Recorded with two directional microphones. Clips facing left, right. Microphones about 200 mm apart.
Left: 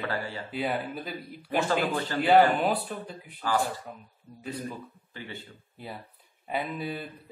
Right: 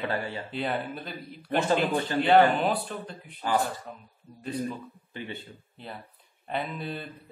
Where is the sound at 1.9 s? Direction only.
20° right (ahead or behind).